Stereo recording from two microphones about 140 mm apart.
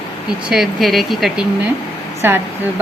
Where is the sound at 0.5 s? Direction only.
Centre (ahead or behind).